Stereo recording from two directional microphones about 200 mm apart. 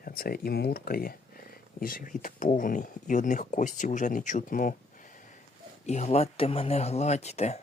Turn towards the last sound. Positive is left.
turn(degrees=35)  # may be behind; listen again after turning